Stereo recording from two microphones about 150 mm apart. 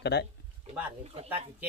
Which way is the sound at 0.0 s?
90° left.